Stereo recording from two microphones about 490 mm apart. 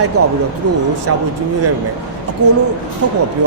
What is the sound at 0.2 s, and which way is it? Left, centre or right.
Speech, right.